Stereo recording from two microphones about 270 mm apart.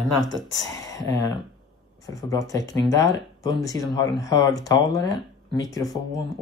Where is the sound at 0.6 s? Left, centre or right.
Centre.